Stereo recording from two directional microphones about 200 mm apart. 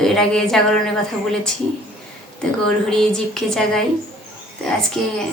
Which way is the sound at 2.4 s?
5° left (ahead or behind).